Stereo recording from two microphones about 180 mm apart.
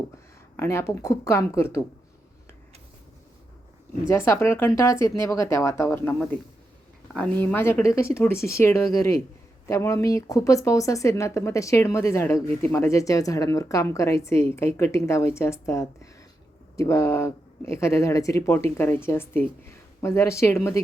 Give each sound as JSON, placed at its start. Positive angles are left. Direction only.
{"t": 0.5, "sound": "speech", "side_deg": 15}
{"t": 4.3, "sound": "speech", "side_deg": 15}